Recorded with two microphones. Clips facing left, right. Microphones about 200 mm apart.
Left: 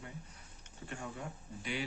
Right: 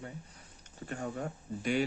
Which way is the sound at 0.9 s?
45° right (ahead or behind).